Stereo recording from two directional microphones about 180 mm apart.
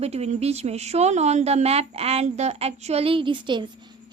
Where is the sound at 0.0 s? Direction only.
35° right (ahead or behind).